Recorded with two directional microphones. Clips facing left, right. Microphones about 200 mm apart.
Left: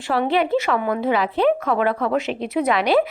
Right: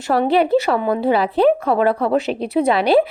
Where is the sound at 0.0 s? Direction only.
40° right (ahead or behind).